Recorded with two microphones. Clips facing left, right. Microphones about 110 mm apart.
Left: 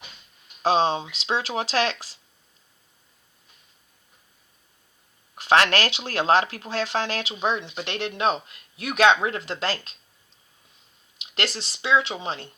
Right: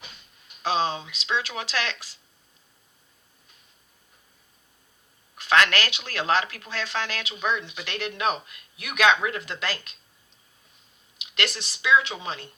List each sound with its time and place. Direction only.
0.6 s speech: 30° left (ahead or behind)
5.4 s speech: 30° left (ahead or behind)
11.2 s speech: 30° left (ahead or behind)